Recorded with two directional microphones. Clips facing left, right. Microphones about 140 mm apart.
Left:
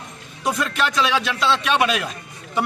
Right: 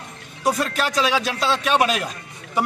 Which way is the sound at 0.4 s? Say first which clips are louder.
Right 1 dB; 40° right (ahead or behind).